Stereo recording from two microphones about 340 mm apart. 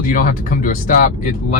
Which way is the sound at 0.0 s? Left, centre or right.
Left.